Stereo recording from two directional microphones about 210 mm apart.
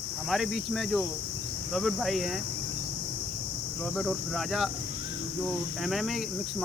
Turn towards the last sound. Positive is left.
turn(degrees=0)  # may be behind; listen again after turning